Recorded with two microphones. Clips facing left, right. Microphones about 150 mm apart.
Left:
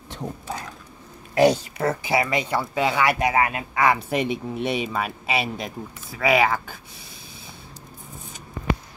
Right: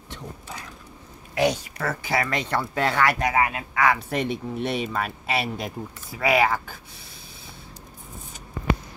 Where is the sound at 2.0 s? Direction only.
10° left (ahead or behind).